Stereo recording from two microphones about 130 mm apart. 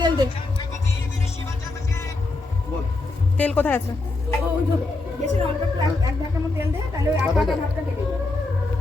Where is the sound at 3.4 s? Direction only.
10° left (ahead or behind).